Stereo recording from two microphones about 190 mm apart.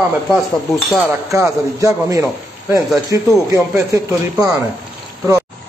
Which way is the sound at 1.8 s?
15° right (ahead or behind).